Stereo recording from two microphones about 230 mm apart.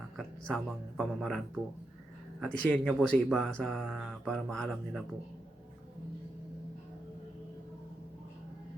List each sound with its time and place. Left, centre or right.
0.2 s speech: centre